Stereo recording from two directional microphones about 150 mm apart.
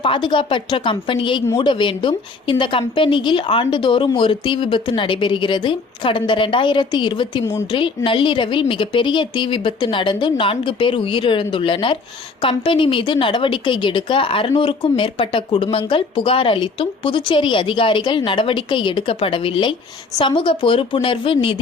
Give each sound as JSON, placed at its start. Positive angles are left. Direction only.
{"t": 0.0, "sound": "a woman's voice", "side_deg": 35}